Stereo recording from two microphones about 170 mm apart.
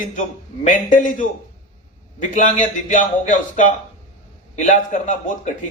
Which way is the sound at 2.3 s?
50° left (ahead or behind).